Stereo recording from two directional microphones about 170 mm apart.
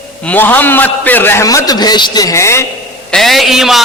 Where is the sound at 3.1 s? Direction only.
Centre (ahead or behind).